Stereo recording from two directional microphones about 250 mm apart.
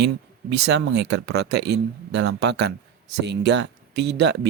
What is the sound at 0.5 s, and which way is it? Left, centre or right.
Speech, right.